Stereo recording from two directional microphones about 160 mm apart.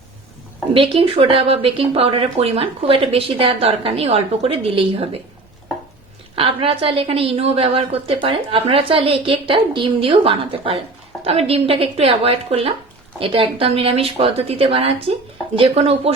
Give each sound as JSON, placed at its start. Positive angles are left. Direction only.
{"t": 0.7, "sound": "a woman's voice", "side_deg": -35}
{"t": 6.3, "sound": "a woman's voice", "side_deg": -35}